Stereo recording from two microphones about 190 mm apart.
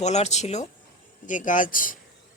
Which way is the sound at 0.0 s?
35° left (ahead or behind).